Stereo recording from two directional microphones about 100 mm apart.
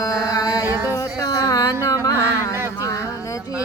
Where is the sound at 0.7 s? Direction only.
25° right (ahead or behind).